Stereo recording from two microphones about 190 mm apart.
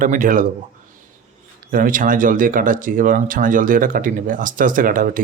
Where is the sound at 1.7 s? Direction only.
45° right (ahead or behind).